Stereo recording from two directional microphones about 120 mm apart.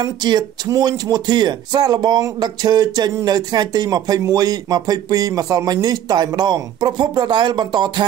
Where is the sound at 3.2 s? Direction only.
35° right (ahead or behind).